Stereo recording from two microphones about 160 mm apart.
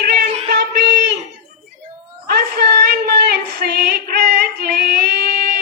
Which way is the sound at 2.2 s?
75° right (ahead or behind).